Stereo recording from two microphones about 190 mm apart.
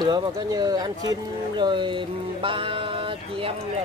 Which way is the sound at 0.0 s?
20° right (ahead or behind).